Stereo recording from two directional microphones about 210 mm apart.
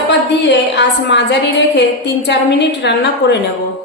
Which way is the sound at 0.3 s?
55° left (ahead or behind).